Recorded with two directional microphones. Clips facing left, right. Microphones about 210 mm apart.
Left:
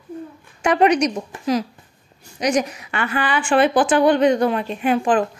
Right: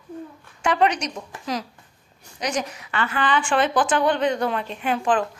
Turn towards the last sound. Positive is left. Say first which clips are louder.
# left 4 dB
turn(degrees=10)  # may be behind; listen again after turning